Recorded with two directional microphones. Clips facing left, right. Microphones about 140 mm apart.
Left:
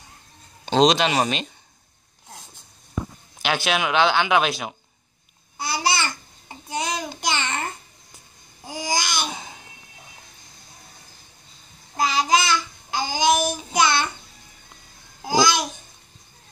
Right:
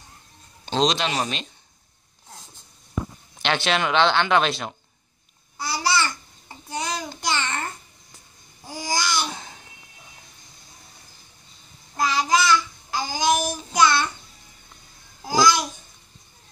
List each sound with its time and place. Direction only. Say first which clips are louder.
1.0 s speech: left 4 dB; 85° left
3.3 s speech: even; 5° left (ahead or behind)
5.7 s babbling: even; 20° left (ahead or behind)
12.0 s babbling: left 1 dB; 20° left (ahead or behind)
15.2 s babbling: even; 20° left (ahead or behind)